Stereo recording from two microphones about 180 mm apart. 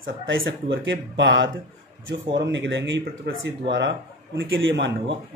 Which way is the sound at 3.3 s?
70° right (ahead or behind).